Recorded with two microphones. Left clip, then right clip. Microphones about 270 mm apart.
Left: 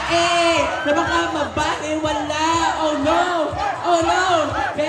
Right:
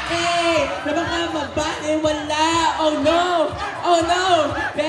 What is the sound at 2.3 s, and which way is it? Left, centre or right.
Speech, centre.